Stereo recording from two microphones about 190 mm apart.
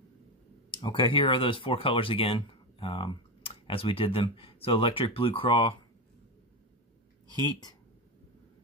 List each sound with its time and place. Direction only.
0.7 s speech: 25° left (ahead or behind)